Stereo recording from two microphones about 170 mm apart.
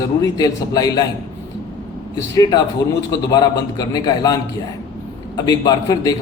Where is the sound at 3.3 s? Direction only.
25° left (ahead or behind).